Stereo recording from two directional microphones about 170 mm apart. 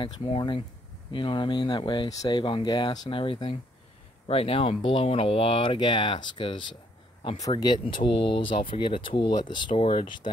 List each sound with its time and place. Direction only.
0.0 s speech: 30° left (ahead or behind)